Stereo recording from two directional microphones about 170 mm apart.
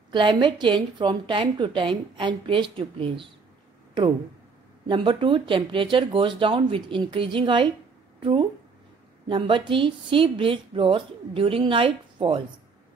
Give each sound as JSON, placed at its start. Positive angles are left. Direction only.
{"t": 0.1, "sound": "a woman's voice", "side_deg": -30}
{"t": 4.8, "sound": "a woman's voice", "side_deg": -30}